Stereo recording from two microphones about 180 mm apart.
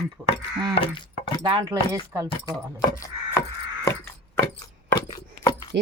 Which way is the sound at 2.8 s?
15° left (ahead or behind).